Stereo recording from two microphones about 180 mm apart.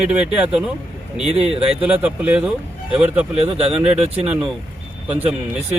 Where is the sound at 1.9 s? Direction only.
5° right (ahead or behind).